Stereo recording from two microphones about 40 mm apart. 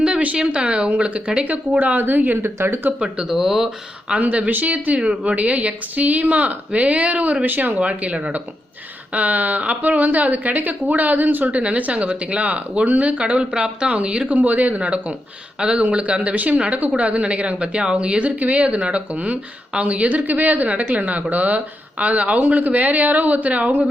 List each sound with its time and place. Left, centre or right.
0.0 s a sound: right
0.3 s a woman's voice: right
1.8 s speech: right
3.0 s speech: centre
4.2 s a woman's voice: right
7.5 s speech: right
7.8 s a woman's voice: right
11.6 s a woman's voice: right
14.3 s speech: right
14.8 s a woman's voice: right
16.3 s a woman's voice: right
18.3 s a woman's voice: right
22.4 s speech: right